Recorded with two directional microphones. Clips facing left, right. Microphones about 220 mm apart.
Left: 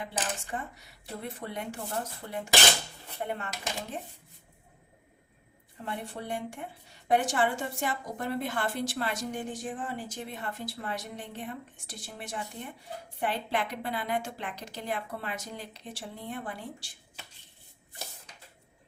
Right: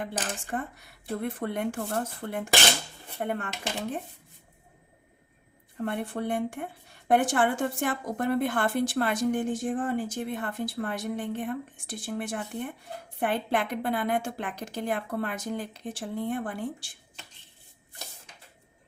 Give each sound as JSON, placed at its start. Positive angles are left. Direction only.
{"t": 0.0, "sound": "a woman's voice", "side_deg": -50}
{"t": 5.7, "sound": "a woman's voice", "side_deg": -55}